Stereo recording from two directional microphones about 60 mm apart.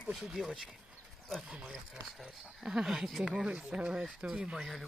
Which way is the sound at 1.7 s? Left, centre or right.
Centre.